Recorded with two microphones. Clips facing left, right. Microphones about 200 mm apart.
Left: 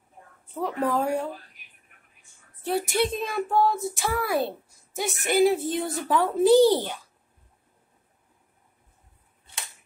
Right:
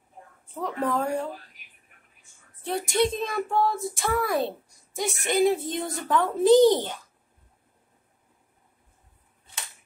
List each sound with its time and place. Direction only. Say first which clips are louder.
0.6 s a woman's voice: left 2 dB; 5° left (ahead or behind)
2.6 s child singing: even; 5° left (ahead or behind)